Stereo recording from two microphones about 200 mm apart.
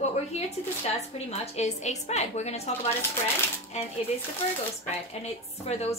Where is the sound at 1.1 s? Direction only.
30° left (ahead or behind).